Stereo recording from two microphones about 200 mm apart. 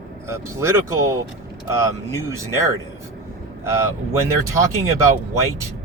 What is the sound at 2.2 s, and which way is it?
Speech, 15° right (ahead or behind).